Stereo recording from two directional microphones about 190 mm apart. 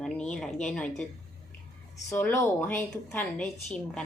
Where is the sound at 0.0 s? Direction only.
5° left (ahead or behind).